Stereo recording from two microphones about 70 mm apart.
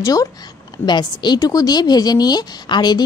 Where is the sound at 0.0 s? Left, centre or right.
Left.